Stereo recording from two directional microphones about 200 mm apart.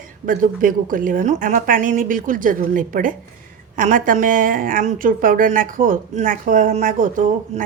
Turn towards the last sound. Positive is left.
turn(degrees=-40)  # may be behind; listen again after turning